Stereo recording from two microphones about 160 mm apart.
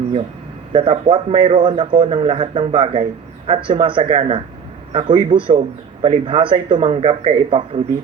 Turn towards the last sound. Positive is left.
turn(degrees=-35)  # may be behind; listen again after turning